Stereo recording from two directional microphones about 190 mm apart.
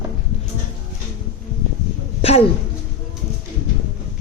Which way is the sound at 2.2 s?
30° left (ahead or behind).